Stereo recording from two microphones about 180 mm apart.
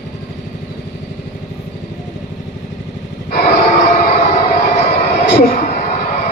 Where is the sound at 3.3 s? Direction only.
60° left (ahead or behind).